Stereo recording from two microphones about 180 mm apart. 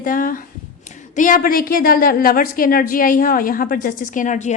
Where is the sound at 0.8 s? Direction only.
45° left (ahead or behind).